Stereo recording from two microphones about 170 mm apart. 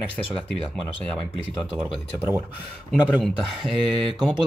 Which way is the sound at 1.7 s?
5° right (ahead or behind).